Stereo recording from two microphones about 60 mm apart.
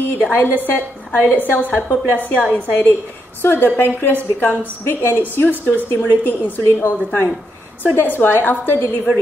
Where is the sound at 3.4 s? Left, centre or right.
Left.